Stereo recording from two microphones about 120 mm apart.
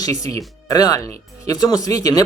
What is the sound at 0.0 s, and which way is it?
Speech, 30° left (ahead or behind).